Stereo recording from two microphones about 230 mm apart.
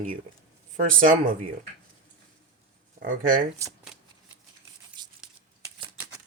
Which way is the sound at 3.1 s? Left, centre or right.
Right.